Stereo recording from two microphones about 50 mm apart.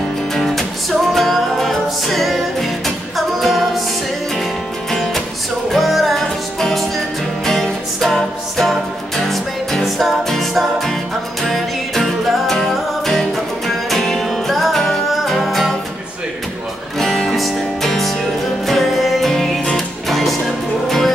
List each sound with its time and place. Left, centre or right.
0.4 s music: centre
5.7 s music: centre
17.0 s music: centre